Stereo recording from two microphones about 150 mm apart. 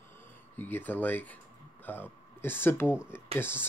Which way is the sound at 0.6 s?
15° left (ahead or behind).